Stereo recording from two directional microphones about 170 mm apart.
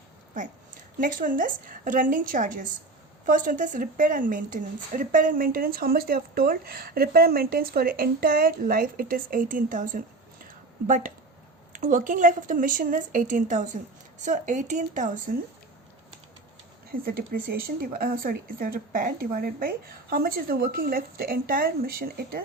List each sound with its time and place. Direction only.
0.9 s a woman's voice: 50° right (ahead or behind)
16.9 s a woman's voice: 60° right (ahead or behind)